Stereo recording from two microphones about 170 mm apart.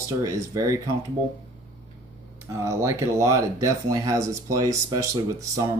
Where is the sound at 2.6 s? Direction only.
15° right (ahead or behind).